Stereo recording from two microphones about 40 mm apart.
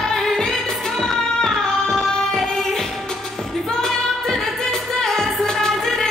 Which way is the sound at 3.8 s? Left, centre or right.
Centre.